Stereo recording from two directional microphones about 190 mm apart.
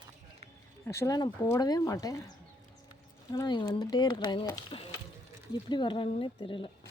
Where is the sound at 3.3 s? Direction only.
25° left (ahead or behind).